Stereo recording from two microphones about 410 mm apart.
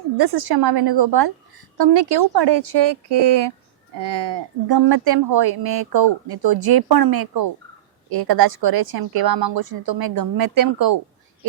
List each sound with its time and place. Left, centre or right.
0.2 s a woman's voice: right